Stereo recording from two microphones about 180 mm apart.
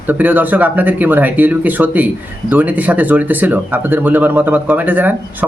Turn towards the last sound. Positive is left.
turn(degrees=-10)  # may be behind; listen again after turning